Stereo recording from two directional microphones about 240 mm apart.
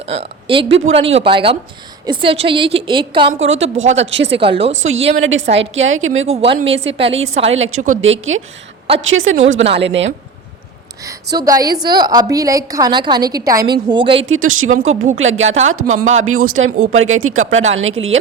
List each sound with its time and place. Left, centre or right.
0.0 s a woman's voice: right
3.5 s a woman's voice: right
4.3 s a woman's voice: right
4.7 s speech: right
6.2 s a woman's voice: right
7.5 s a woman's voice: right
11.3 s a woman's voice: centre
14.3 s speech: right